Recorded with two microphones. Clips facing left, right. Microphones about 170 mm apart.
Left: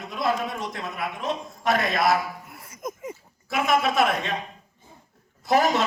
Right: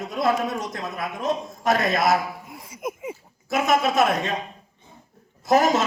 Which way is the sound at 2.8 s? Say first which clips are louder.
Right 3 dB; 10° right (ahead or behind).